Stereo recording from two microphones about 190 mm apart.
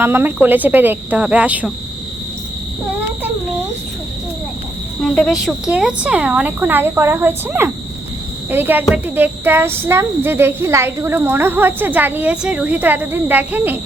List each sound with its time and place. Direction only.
0.0 s speech: 10° right (ahead or behind)
5.0 s speech: centre (ahead or behind)